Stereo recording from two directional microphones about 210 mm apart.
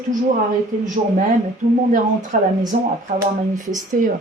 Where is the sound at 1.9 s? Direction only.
40° right (ahead or behind).